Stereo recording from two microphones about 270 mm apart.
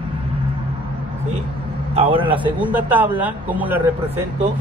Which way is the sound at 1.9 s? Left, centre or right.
Centre.